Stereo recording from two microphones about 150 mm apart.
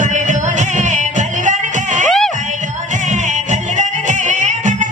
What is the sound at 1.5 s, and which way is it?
Music, 55° right (ahead or behind).